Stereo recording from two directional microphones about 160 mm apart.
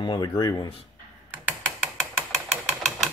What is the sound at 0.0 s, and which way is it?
Speech, 25° left (ahead or behind).